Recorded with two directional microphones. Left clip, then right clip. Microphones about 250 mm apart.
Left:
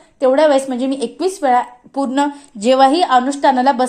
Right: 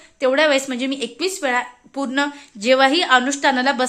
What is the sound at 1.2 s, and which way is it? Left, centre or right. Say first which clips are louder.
A woman's voice: left 7 dB; centre.